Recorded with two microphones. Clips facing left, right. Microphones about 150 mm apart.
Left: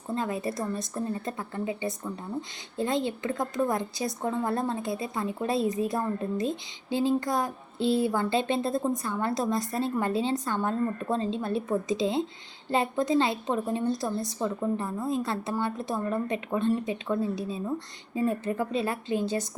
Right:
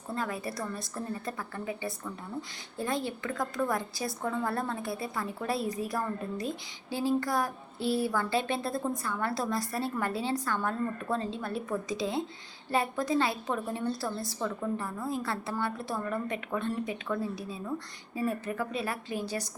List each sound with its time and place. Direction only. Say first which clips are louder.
0.1 s a woman's voice: left 4 dB; 20° left (ahead or behind)